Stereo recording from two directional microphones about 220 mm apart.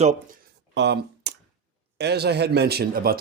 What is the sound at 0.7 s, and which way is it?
Speech, 50° right (ahead or behind).